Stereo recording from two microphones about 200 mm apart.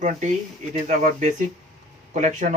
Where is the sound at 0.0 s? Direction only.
40° right (ahead or behind).